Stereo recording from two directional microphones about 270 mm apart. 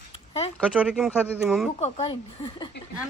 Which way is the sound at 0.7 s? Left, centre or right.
Centre.